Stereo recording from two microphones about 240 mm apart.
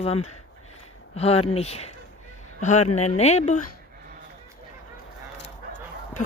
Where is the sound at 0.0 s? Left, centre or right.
Left.